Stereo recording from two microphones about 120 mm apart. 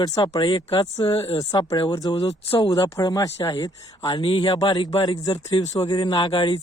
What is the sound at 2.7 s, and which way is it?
Speech, 25° left (ahead or behind).